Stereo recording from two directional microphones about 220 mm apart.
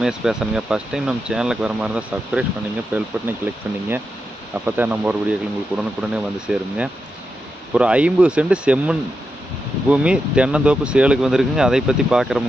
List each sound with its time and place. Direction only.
0.0 s speech: 5° right (ahead or behind)